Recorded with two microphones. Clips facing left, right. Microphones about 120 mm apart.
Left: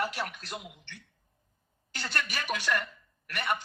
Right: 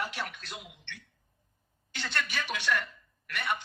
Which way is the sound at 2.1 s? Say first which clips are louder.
Left 1 dB; 40° left (ahead or behind).